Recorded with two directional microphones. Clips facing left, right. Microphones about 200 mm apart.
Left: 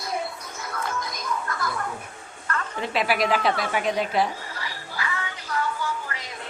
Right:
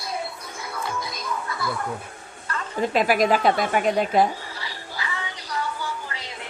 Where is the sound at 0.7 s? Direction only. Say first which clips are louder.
Even; 10° right (ahead or behind).